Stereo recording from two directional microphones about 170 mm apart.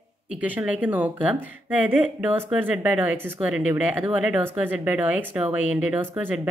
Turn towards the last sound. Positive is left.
turn(degrees=-10)  # may be behind; listen again after turning